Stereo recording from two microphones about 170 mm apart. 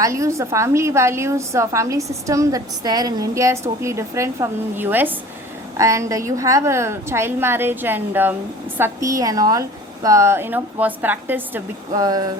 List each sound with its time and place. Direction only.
0.0 s a woman's voice: 20° right (ahead or behind)
11.9 s speech: 25° right (ahead or behind)